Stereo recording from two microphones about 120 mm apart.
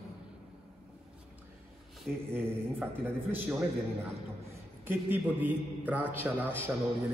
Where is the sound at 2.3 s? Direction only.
15° right (ahead or behind).